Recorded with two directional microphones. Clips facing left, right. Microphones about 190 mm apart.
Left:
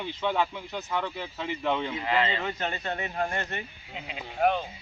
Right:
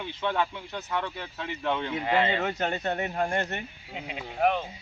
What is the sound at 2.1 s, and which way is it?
Speech, 45° right (ahead or behind).